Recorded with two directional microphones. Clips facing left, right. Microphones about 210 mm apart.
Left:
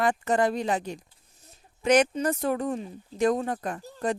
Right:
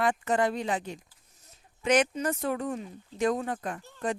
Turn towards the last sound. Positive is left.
turn(degrees=35)  # may be behind; listen again after turning